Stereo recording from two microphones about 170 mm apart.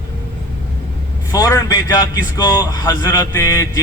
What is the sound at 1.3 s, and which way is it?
A man's voice, 20° left (ahead or behind).